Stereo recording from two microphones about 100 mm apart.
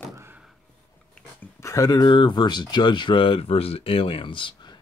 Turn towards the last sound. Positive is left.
turn(degrees=50)  # may be behind; listen again after turning